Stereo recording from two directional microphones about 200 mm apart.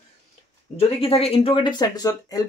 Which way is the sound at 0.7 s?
30° left (ahead or behind).